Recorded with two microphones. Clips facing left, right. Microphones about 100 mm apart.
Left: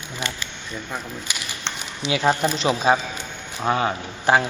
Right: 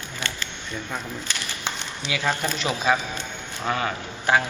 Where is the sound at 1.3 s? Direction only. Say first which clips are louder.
Even; 10° left (ahead or behind).